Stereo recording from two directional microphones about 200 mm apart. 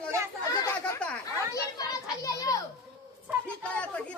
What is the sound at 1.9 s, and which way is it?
Children playing, 15° left (ahead or behind).